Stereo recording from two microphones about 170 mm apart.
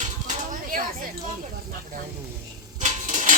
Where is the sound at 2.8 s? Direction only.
45° right (ahead or behind).